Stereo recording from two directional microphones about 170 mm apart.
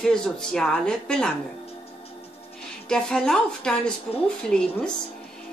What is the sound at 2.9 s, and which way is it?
Speech, 5° left (ahead or behind).